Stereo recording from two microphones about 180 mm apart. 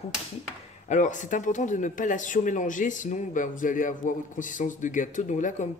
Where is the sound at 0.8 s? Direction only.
45° left (ahead or behind).